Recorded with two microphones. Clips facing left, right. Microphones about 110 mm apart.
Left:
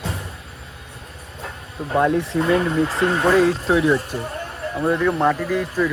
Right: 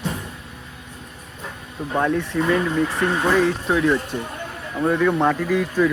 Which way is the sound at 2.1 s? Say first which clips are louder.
Even; 25° left (ahead or behind).